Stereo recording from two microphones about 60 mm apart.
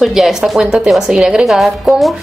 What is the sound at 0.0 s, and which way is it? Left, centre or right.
A woman's voice, centre.